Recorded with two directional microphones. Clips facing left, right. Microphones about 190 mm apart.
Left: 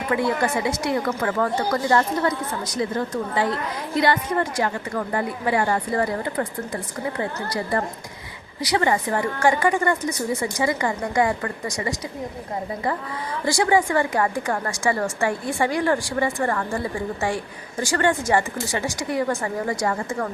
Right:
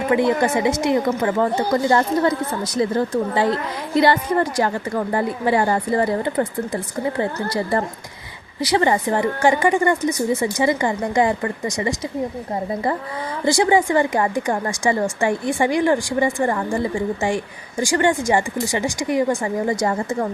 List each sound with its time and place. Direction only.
0.1 s a woman's voice: 20° right (ahead or behind)
13.4 s a woman's voice: 20° right (ahead or behind)